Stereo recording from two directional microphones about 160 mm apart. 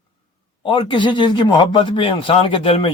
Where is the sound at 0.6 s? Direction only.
30° left (ahead or behind).